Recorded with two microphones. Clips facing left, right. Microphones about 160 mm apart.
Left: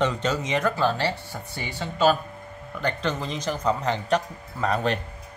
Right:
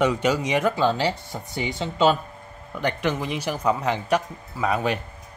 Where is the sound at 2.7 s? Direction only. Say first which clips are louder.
Right 2 dB; 10° right (ahead or behind).